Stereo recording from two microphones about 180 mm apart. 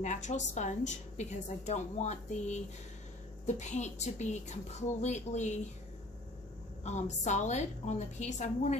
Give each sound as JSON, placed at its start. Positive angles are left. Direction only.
{"t": 0.0, "sound": "a woman's voice", "side_deg": 40}
{"t": 6.8, "sound": "a woman's voice", "side_deg": 40}